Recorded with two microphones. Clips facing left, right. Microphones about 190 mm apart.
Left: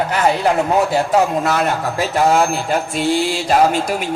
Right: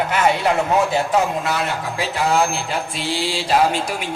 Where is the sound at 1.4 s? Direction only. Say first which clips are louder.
Left 5 dB; 50° left (ahead or behind).